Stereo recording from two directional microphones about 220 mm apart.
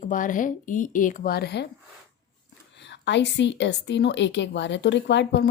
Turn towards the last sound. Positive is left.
turn(degrees=50)  # may be behind; listen again after turning